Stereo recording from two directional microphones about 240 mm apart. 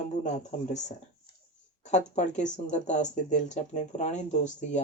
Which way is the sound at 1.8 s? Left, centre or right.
Left.